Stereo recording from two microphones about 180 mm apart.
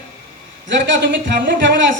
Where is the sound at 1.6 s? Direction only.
85° right.